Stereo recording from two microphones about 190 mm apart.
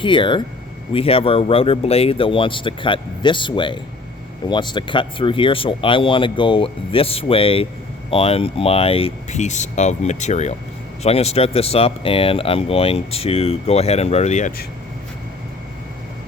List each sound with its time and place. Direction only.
0.0 s speech: 25° left (ahead or behind)